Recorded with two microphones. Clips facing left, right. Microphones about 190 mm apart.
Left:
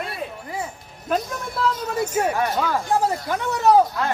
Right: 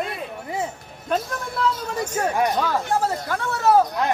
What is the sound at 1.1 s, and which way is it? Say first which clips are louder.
A woman's voice: even; 5° left (ahead or behind).